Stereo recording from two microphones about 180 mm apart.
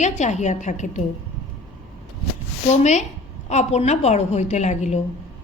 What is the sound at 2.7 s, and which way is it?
A woman's voice, 40° left (ahead or behind).